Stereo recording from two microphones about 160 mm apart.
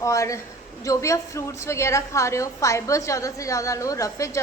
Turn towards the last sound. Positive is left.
turn(degrees=20)  # may be behind; listen again after turning